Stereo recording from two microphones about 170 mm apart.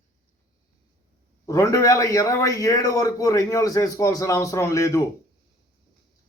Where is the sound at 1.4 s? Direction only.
20° left (ahead or behind).